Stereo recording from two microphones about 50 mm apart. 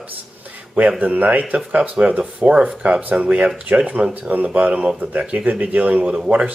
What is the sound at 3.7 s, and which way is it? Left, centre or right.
Speech, right.